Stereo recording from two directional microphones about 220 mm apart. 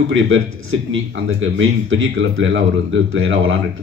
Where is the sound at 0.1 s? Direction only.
60° right (ahead or behind).